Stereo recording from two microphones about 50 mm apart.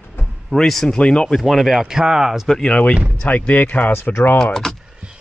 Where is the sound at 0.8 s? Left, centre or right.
Centre.